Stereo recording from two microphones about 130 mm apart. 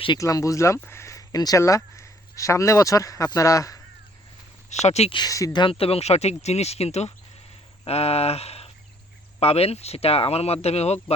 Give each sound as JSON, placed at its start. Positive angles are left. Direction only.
{"t": 0.2, "sound": "speech", "side_deg": 25}
{"t": 4.7, "sound": "speech", "side_deg": 60}
{"t": 5.1, "sound": "speech", "side_deg": 30}
{"t": 5.6, "sound": "speech", "side_deg": 50}